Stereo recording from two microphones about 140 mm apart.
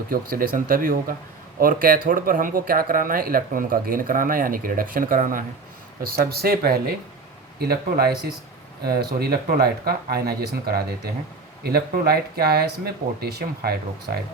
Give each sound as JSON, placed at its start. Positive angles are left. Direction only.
{"t": 0.1, "sound": "speech", "side_deg": -90}
{"t": 6.0, "sound": "speech", "side_deg": -90}